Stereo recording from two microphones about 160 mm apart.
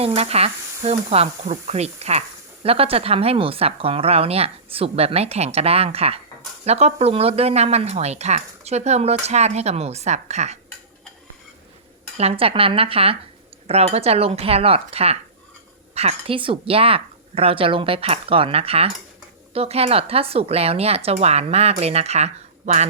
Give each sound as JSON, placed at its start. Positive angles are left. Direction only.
{"t": 0.0, "sound": "a woman's voice", "side_deg": -40}
{"t": 12.1, "sound": "a woman's voice", "side_deg": -40}